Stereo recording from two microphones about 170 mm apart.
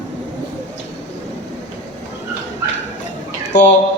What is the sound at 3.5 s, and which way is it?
Speech, 45° left (ahead or behind).